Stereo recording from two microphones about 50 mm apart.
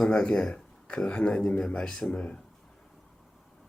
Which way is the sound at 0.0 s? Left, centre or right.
Centre.